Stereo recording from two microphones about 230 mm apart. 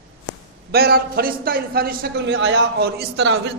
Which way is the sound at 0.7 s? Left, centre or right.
Right.